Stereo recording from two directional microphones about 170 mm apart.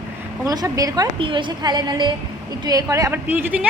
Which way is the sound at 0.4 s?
20° right (ahead or behind).